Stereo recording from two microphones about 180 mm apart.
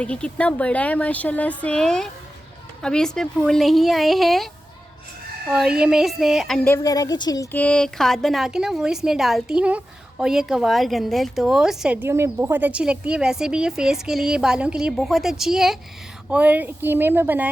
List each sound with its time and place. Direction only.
0.0 s a woman's voice: 5° left (ahead or behind)
5.5 s a woman's voice: 5° right (ahead or behind)
6.8 s a woman's voice: 20° left (ahead or behind)
7.5 s a woman's voice: 5° left (ahead or behind); by 17.5 s 10° right (ahead or behind)